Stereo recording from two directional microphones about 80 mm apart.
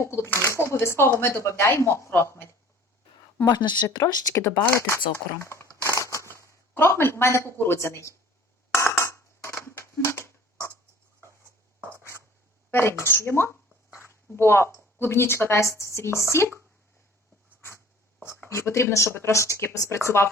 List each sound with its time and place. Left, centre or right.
0.0 s speech: left
3.5 s a woman's voice: left
3.8 s speech: left
4.7 s crumpling: left
6.7 s speech: left
8.7 s a sound: left
12.7 s speech: left
14.0 s a sound: left
14.9 s speech: left
18.4 s speech: left